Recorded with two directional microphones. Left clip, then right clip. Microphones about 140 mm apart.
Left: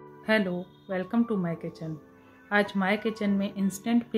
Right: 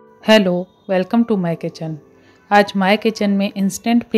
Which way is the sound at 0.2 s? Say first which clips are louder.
Right 14 dB; 60° right (ahead or behind).